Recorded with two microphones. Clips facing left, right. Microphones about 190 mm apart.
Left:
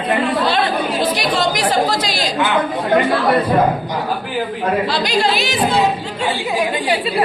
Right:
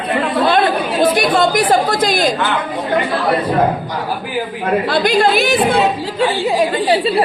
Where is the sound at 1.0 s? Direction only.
55° right (ahead or behind).